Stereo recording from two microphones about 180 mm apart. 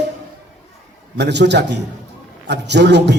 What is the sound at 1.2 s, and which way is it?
A man's voice, 70° right (ahead or behind).